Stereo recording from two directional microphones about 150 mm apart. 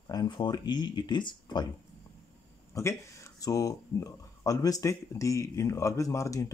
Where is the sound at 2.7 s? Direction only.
20° left (ahead or behind).